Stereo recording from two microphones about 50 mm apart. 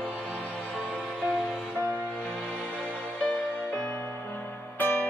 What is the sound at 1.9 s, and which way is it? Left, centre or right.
Music, centre.